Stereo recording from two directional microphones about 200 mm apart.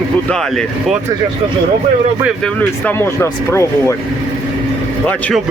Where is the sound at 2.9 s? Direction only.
10° left (ahead or behind).